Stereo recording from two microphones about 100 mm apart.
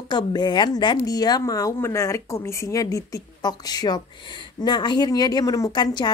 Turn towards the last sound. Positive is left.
turn(degrees=45)  # may be behind; listen again after turning